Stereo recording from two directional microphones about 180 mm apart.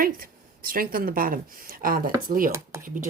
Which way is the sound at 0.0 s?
55° right (ahead or behind).